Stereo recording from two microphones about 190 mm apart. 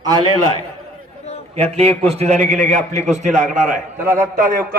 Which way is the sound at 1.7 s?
30° right (ahead or behind).